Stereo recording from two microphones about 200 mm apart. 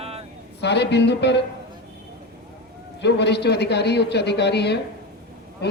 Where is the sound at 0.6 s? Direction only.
60° left (ahead or behind).